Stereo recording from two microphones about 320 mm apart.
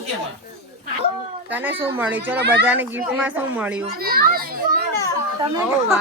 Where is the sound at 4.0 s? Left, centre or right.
Right.